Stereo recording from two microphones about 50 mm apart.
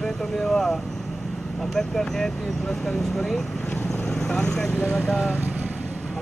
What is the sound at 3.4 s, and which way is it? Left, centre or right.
Vehicle, centre.